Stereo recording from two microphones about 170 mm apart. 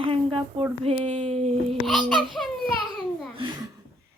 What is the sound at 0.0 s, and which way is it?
Speech, 30° right (ahead or behind).